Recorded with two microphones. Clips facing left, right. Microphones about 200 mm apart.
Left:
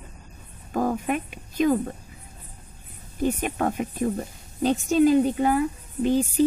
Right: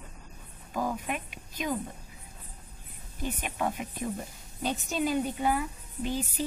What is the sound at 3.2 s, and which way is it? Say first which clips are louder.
Speech: left 8 dB; 45° left (ahead or behind).